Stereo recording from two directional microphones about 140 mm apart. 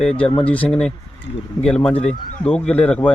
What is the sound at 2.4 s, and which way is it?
Speech, 5° left (ahead or behind).